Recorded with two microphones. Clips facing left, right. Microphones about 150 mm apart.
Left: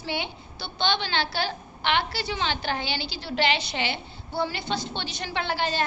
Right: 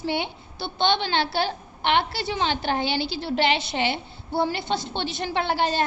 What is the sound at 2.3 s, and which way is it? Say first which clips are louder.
A woman's voice: right 3 dB; 50° right (ahead or behind).